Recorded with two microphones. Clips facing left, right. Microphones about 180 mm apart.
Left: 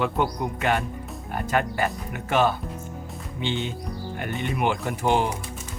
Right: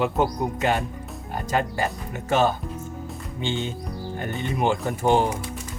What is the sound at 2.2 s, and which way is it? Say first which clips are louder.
Speech: right 1 dB; 40° right (ahead or behind).